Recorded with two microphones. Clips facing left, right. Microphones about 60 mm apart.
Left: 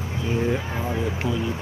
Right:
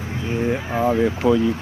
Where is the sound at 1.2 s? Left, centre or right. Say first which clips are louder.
Right 12 dB; right.